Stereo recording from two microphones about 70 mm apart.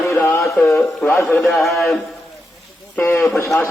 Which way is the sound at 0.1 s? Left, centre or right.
Left.